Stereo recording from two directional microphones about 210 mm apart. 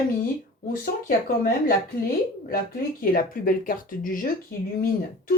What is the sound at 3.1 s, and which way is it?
Speech, 40° left (ahead or behind).